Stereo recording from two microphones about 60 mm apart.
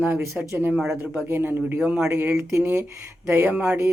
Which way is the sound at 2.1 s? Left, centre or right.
Right.